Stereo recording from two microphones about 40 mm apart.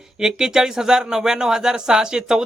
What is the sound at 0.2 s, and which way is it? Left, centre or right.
Speech, centre.